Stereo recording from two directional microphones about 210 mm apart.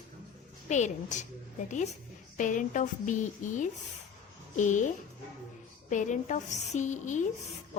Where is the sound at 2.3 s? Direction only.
35° left (ahead or behind).